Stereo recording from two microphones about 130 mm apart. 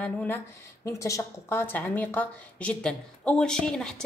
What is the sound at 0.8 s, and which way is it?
A woman's voice, 25° left (ahead or behind).